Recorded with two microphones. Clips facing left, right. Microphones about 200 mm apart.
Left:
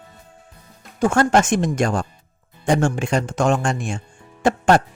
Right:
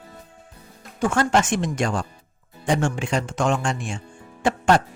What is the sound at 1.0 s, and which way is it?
Speech, 45° left (ahead or behind).